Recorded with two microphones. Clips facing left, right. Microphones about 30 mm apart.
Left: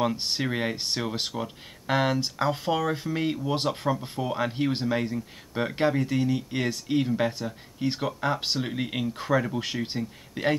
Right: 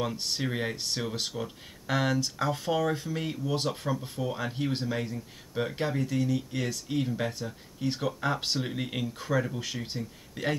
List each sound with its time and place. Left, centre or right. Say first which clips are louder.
0.4 s speech: left 3 dB; left
0.7 s speech: left 3 dB; left
8.0 s speech: left 1 dB; centre
9.0 s speech: left 4 dB; left